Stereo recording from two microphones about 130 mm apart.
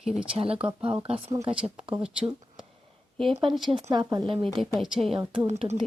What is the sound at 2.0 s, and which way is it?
Speech, 5° right (ahead or behind).